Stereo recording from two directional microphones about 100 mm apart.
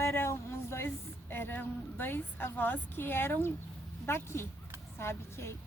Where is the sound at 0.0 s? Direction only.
25° left (ahead or behind).